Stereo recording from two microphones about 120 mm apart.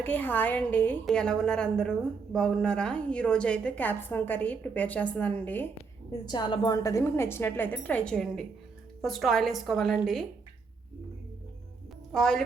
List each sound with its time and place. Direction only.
0.0 s a woman's voice: 15° left (ahead or behind)
6.2 s a woman's voice: 40° left (ahead or behind); by 10.2 s centre (ahead or behind)
12.1 s a woman's voice: 5° left (ahead or behind)